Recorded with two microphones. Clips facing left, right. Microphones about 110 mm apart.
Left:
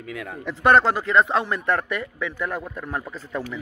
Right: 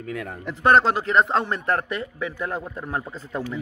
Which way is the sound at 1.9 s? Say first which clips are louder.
Even; 35° right (ahead or behind).